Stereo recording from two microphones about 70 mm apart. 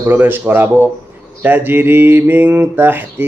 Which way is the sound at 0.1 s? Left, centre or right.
Right.